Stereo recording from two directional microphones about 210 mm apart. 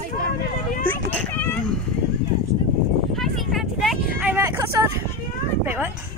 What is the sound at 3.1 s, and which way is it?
Vehicle, centre (ahead or behind).